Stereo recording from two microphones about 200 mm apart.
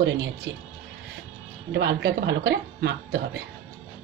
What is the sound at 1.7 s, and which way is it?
A woman's voice, 60° right (ahead or behind).